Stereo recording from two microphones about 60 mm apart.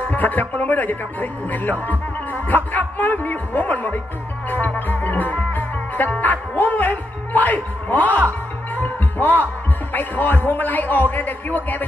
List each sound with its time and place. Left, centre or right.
0.1 s speech: left
4.5 s music: left
6.2 s a man's voice: left